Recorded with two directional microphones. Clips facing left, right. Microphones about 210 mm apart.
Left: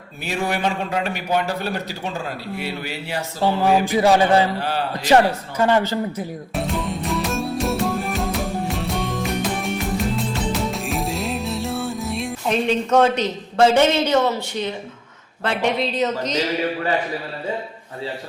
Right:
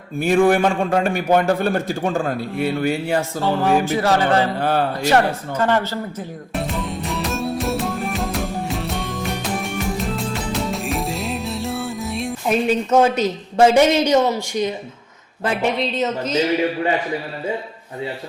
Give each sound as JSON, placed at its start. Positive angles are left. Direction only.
{"t": 0.2, "sound": "a man's voice", "side_deg": -50}
{"t": 3.6, "sound": "speech", "side_deg": 15}
{"t": 4.6, "sound": "a man's voice", "side_deg": -50}
{"t": 5.0, "sound": "speech", "side_deg": 15}
{"t": 6.5, "sound": "music", "side_deg": 0}
{"t": 15.4, "sound": "speech", "side_deg": 0}